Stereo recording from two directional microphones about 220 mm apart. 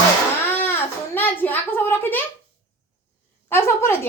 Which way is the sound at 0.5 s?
10° left (ahead or behind).